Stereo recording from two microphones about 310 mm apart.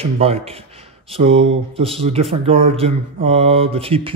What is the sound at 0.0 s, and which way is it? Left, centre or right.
Speech, centre.